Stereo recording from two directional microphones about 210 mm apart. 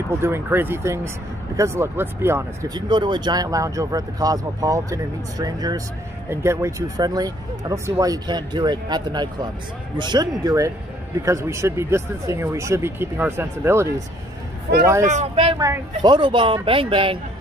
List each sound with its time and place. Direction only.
0.2 s speech: 10° right (ahead or behind)
15.0 s speech: 30° right (ahead or behind)